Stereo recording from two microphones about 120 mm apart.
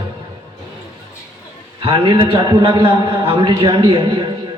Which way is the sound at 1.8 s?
45° right (ahead or behind).